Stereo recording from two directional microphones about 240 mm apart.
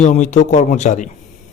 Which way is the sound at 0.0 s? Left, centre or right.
Left.